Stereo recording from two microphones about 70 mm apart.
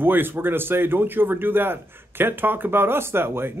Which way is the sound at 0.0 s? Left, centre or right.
Right.